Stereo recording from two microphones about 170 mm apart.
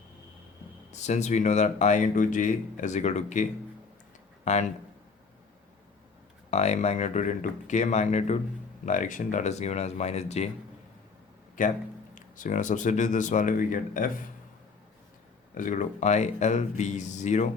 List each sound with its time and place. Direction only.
0.9 s speech: 40° left (ahead or behind)
4.5 s speech: 40° left (ahead or behind)
6.5 s speech: 40° left (ahead or behind)
11.6 s speech: 50° left (ahead or behind)
15.5 s speech: 50° left (ahead or behind)